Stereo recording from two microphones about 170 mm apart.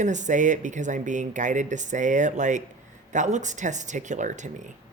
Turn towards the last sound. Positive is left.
turn(degrees=-45)  # may be behind; listen again after turning